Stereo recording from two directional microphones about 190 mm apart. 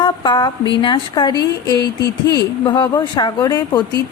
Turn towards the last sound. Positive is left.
turn(degrees=20)  # may be behind; listen again after turning